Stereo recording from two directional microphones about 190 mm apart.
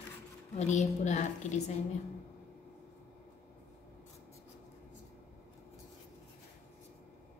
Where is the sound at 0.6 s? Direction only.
35° left (ahead or behind).